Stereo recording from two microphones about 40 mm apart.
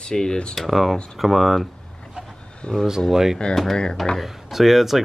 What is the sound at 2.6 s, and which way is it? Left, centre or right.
Speech, centre.